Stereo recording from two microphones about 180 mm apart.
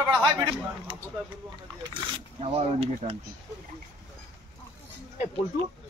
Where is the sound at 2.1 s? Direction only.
30° right (ahead or behind).